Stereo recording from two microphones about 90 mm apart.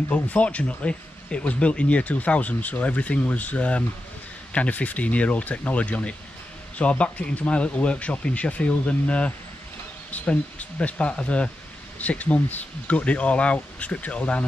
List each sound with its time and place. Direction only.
0.1 s speech: 15° left (ahead or behind)